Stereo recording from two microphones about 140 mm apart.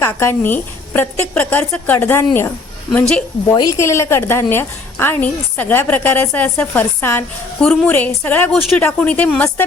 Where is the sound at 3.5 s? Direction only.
20° left (ahead or behind).